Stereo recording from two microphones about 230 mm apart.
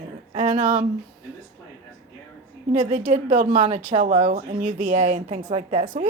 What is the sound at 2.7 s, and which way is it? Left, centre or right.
A woman's voice, right.